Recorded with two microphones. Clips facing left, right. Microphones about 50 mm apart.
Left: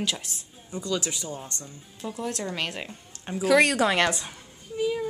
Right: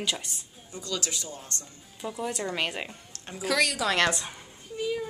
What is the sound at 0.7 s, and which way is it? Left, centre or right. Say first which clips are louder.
Speech: left 4 dB; centre.